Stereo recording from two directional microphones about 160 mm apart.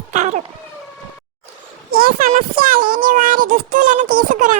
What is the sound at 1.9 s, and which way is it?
A child's voice, 65° right (ahead or behind).